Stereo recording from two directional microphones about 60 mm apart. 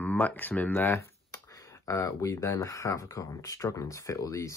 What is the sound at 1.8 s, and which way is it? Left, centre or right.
Speech, left.